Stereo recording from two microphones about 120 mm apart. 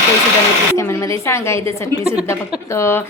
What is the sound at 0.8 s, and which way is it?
A woman's voice, 25° left (ahead or behind).